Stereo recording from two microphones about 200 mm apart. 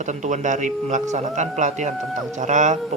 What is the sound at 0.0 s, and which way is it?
Speech, 35° right (ahead or behind).